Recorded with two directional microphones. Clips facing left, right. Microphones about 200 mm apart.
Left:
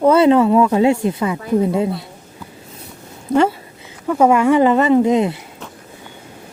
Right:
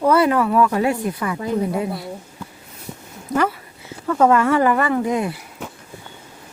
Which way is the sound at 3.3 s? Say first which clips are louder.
Left 5 dB; 25° left (ahead or behind).